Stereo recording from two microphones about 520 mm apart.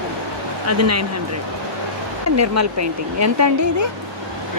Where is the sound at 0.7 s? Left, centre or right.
Right.